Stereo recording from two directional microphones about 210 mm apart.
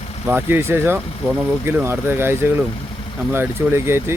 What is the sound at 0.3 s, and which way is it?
Speech, 10° right (ahead or behind).